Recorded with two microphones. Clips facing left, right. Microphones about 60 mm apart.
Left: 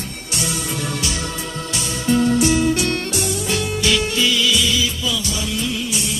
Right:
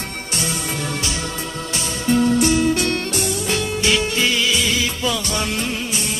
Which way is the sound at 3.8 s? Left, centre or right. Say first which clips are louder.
Even; right.